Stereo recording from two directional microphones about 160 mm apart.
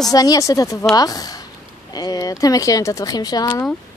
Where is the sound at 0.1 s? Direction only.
25° left (ahead or behind).